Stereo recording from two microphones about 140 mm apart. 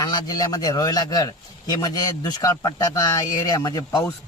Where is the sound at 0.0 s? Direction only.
30° left (ahead or behind).